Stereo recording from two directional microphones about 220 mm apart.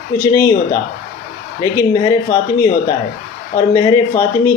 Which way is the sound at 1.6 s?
15° left (ahead or behind).